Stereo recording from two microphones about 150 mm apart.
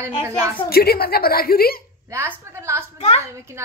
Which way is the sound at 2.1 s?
20° right (ahead or behind).